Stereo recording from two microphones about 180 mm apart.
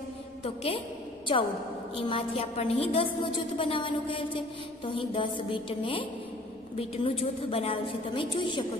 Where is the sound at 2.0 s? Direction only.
30° left (ahead or behind).